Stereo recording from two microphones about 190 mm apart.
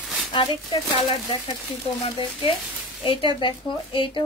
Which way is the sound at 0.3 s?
25° left (ahead or behind).